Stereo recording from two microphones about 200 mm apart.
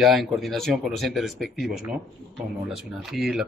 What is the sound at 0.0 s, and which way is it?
Speech, centre (ahead or behind).